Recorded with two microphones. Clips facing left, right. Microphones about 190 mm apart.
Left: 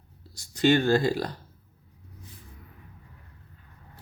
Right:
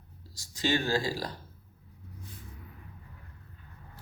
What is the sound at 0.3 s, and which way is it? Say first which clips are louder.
Speech: left 8 dB; 60° left (ahead or behind).